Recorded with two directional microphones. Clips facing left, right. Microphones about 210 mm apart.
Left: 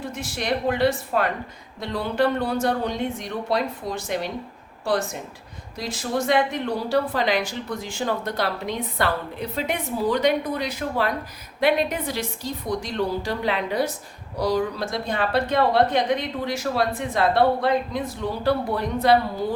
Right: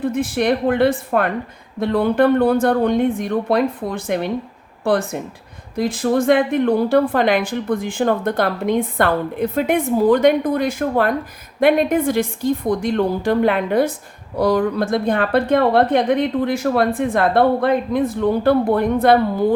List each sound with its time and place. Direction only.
0.0 s a woman's voice: 55° right (ahead or behind)